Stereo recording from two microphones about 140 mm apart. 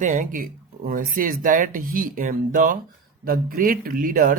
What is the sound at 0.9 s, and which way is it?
Speech, 90° right.